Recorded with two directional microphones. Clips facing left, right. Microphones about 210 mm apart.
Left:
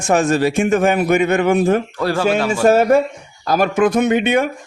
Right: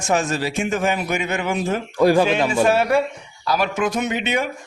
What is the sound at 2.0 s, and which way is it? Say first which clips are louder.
Speech: right 4 dB; 15° right (ahead or behind).